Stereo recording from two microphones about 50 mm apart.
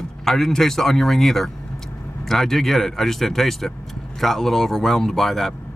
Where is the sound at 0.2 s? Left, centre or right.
Centre.